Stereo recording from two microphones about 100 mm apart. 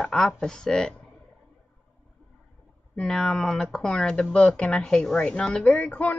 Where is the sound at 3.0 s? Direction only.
10° left (ahead or behind).